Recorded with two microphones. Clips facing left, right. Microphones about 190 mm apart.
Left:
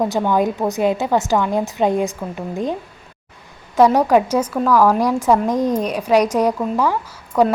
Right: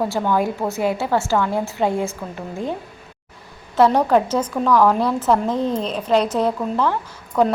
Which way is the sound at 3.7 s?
10° left (ahead or behind).